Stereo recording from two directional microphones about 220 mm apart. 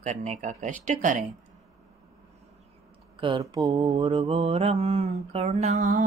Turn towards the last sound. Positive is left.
turn(degrees=-35)  # may be behind; listen again after turning